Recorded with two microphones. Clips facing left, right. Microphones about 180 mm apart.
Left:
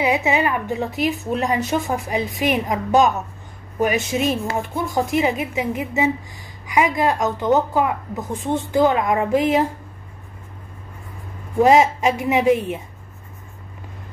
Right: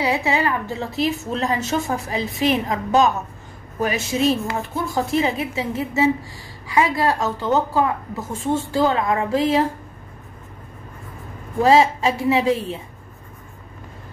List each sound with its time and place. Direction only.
0.0 s a woman's voice: 20° left (ahead or behind)
11.6 s a woman's voice: 20° left (ahead or behind)